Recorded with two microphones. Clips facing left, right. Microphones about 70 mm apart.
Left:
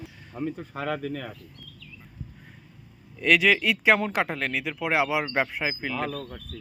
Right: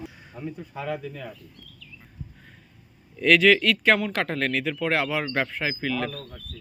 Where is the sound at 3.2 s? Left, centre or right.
Centre.